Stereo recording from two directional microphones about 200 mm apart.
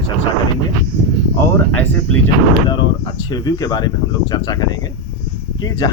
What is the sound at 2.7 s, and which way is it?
Speech, 20° left (ahead or behind).